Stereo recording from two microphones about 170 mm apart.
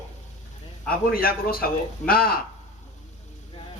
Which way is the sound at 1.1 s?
60° left (ahead or behind).